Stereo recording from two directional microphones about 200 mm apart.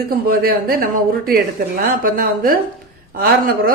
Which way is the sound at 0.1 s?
50° right (ahead or behind).